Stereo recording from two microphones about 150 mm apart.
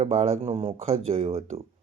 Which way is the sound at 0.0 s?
45° right (ahead or behind).